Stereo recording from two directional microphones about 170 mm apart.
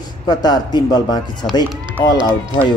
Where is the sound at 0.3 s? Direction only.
25° left (ahead or behind).